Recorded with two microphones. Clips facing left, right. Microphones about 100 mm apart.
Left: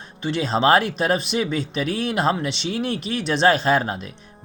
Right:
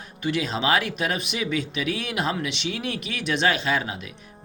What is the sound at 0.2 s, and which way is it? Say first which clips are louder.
Speech: left 5 dB; 30° left (ahead or behind).